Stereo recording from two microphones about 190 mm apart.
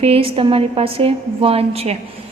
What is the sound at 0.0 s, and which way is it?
A woman's voice, 30° right (ahead or behind).